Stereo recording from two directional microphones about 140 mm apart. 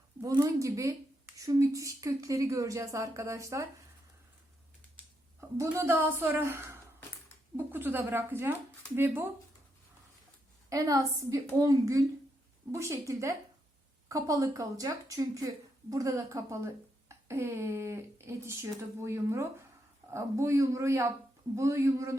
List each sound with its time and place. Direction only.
0.2 s a woman's voice: 25° right (ahead or behind)
5.5 s a woman's voice: 20° right (ahead or behind)
10.7 s a woman's voice: 25° right (ahead or behind)